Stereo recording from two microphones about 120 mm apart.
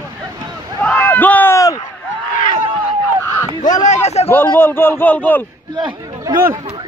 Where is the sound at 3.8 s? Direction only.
70° left (ahead or behind).